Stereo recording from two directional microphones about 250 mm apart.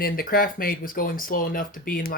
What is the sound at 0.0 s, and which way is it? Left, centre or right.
Speech, left.